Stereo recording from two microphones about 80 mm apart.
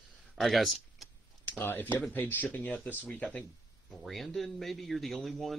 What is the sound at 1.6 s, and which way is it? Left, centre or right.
Speech, left.